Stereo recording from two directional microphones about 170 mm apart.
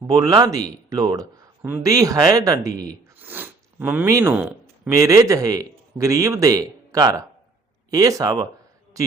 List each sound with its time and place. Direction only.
0.1 s speech: 20° right (ahead or behind)